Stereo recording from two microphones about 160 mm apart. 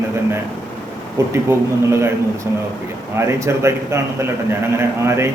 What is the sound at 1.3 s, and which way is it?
Speech, 15° right (ahead or behind).